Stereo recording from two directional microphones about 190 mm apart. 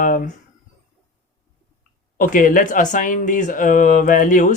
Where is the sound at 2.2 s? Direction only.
45° left (ahead or behind).